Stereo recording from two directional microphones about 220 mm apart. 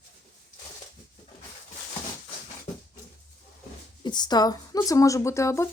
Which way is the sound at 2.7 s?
35° left (ahead or behind).